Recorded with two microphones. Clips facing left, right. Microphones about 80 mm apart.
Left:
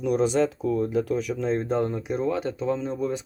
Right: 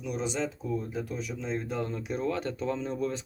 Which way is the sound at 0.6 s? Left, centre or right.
Left.